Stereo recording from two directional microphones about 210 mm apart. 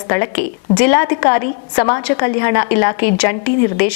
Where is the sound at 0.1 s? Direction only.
10° left (ahead or behind).